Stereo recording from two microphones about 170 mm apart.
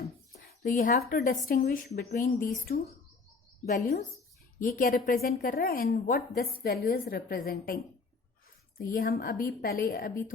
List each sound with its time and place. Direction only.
0.4 s speech: 50° left (ahead or behind)
3.7 s a woman's voice: 65° left (ahead or behind)
8.8 s a woman's voice: 60° left (ahead or behind)